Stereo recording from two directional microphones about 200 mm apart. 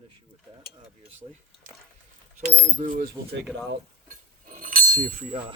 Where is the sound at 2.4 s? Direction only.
40° right (ahead or behind).